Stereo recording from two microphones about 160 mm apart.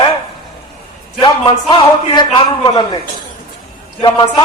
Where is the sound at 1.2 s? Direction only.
30° left (ahead or behind).